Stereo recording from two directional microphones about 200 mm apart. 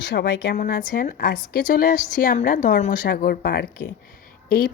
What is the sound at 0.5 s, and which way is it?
Speech, 45° left (ahead or behind).